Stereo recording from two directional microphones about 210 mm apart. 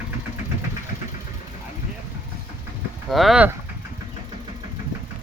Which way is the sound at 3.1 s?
Centre (ahead or behind).